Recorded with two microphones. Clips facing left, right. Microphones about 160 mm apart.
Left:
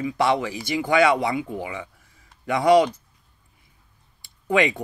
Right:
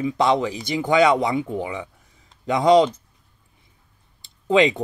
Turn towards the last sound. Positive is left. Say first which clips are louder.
# right 4 dB
turn(degrees=-20)  # may be behind; listen again after turning